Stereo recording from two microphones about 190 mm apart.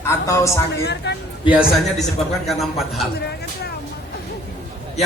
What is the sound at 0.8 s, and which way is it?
Speech, 65° left (ahead or behind).